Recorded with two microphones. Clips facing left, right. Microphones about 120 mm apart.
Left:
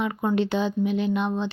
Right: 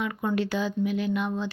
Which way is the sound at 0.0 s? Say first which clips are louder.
Left 3 dB; 25° left (ahead or behind).